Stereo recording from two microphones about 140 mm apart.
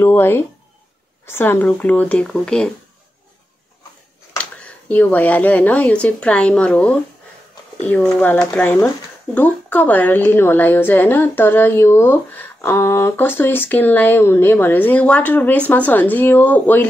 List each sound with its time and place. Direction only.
0.0 s a woman's voice: 15° left (ahead or behind)
4.4 s a woman's voice: 10° left (ahead or behind)